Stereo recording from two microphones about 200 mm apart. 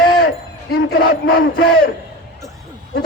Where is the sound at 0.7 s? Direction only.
50° left (ahead or behind).